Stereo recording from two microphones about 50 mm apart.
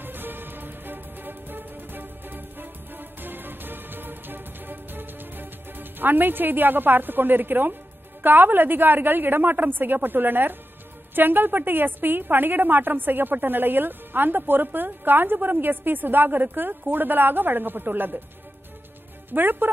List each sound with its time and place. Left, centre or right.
0.0 s music: right
8.2 s a woman's voice: right
19.3 s a woman's voice: right